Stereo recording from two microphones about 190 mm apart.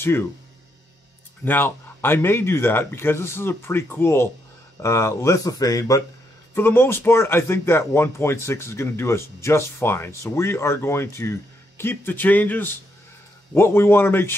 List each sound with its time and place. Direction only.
0.0 s speech: 10° left (ahead or behind)
1.4 s speech: 10° left (ahead or behind)